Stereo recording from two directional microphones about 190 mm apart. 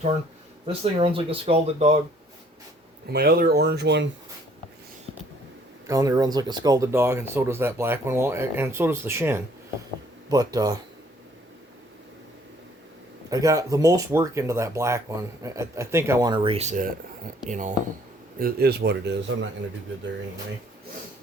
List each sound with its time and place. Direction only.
0.6 s speech: 30° right (ahead or behind)
3.1 s speech: 55° right (ahead or behind)
5.9 s speech: 20° right (ahead or behind)
13.3 s speech: 15° right (ahead or behind)
16.3 s speech: 30° right (ahead or behind)
18.3 s speech: 55° right (ahead or behind)